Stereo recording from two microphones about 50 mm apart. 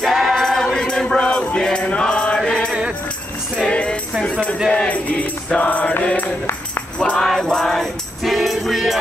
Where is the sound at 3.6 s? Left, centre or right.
Left.